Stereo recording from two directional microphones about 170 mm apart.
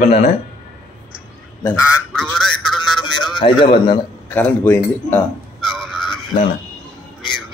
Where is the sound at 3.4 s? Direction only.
30° left (ahead or behind).